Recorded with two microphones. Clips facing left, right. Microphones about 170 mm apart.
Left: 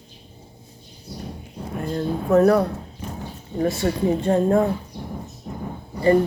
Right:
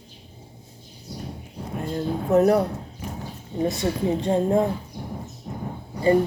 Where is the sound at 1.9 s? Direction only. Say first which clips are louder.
Left 2 dB; 20° right (ahead or behind).